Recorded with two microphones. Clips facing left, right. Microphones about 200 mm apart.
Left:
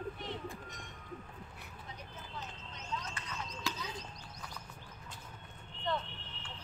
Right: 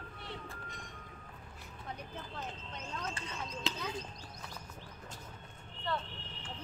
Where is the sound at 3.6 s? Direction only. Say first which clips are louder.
Right 1 dB; 25° right (ahead or behind).